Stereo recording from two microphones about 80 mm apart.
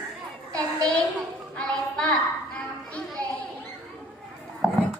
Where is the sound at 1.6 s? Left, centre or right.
Centre.